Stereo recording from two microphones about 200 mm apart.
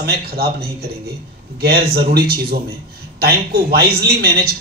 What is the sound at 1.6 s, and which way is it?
A man's voice, 50° right (ahead or behind).